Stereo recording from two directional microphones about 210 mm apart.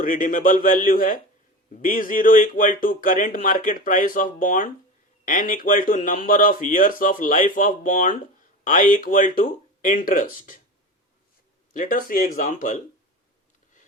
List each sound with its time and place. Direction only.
0.0 s speech: 40° left (ahead or behind)
11.7 s speech: 40° left (ahead or behind)